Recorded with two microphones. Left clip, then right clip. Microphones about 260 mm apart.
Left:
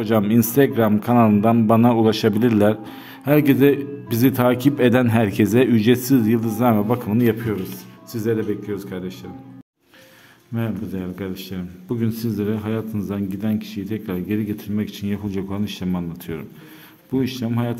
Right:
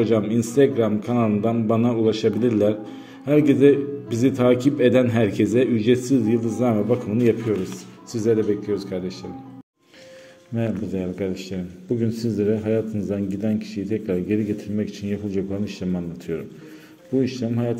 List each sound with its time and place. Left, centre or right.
0.0 s a man's voice: left
10.5 s a man's voice: centre